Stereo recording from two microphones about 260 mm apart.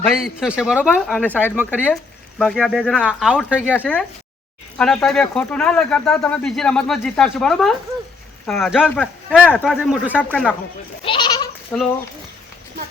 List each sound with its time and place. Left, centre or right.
0.0 s speech: centre
11.0 s goat: centre
11.7 s speech: centre